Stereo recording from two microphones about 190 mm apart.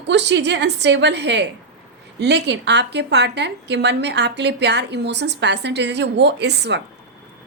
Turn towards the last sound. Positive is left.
turn(degrees=-65)  # may be behind; listen again after turning